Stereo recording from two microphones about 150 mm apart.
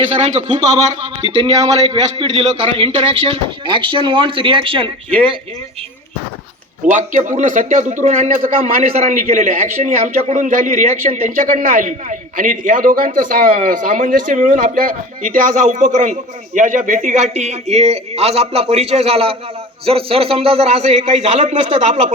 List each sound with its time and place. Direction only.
0.2 s a man's voice: 50° right (ahead or behind)
0.5 s a man's voice: 25° right (ahead or behind)
1.0 s speech: 40° right (ahead or behind)
6.9 s a man's voice: 55° right (ahead or behind)
8.8 s a man's voice: 50° right (ahead or behind)